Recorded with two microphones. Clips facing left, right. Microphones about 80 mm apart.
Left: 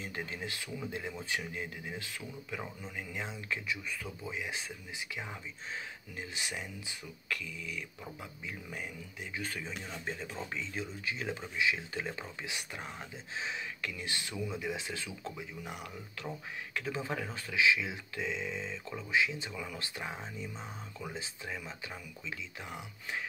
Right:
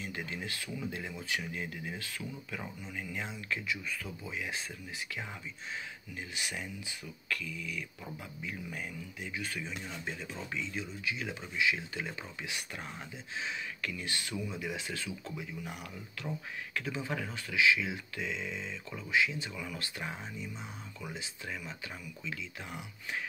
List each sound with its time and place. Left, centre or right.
0.0 s speech: left
6.3 s speech: left
9.4 s speech: left
22.3 s speech: left